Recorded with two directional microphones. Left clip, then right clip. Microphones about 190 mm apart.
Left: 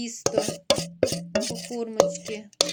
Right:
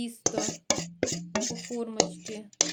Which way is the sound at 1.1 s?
50° left (ahead or behind).